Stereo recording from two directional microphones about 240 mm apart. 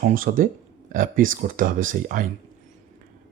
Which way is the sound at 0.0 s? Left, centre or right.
Right.